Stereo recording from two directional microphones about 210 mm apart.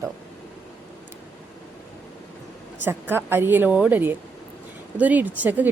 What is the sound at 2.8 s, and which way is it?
Speech, 10° right (ahead or behind).